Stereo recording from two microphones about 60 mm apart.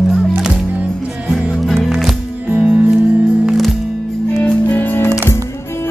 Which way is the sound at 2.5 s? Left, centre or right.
Centre.